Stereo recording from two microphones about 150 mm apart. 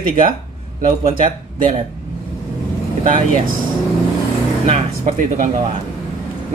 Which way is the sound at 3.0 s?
60° right (ahead or behind).